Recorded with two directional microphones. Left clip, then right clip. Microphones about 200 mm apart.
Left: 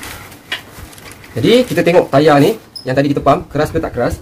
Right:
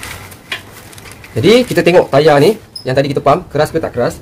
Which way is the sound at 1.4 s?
25° right (ahead or behind).